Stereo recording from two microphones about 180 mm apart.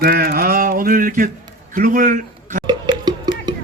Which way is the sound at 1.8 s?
50° right (ahead or behind).